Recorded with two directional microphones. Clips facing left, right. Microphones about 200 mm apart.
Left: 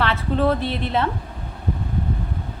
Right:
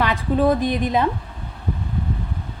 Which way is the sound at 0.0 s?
15° right (ahead or behind).